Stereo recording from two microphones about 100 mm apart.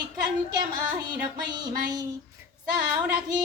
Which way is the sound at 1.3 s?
45° right (ahead or behind).